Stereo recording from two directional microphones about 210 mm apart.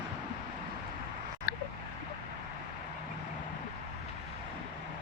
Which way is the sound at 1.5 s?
50° left (ahead or behind).